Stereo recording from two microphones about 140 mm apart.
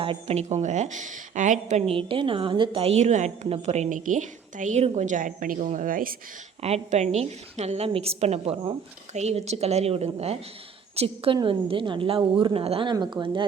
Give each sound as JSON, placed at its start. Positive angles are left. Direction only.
{"t": 0.0, "sound": "a woman's voice", "side_deg": -45}
{"t": 2.0, "sound": "a woman's voice", "side_deg": -40}
{"t": 6.6, "sound": "a woman's voice", "side_deg": -50}